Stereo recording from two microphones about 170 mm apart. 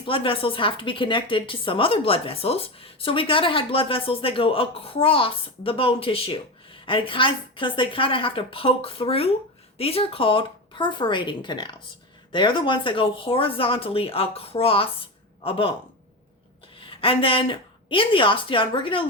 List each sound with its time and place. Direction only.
0.0 s a woman's voice: 30° left (ahead or behind)
16.8 s speech: 30° left (ahead or behind)